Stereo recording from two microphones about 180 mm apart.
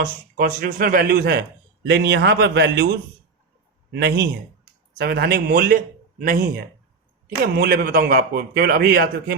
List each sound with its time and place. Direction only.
0.0 s a man's voice: 55° right (ahead or behind); by 2.8 s 70° right (ahead or behind)
3.9 s a man's voice: 65° right (ahead or behind)